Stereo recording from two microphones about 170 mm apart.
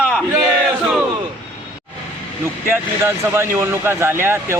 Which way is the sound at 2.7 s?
15° right (ahead or behind).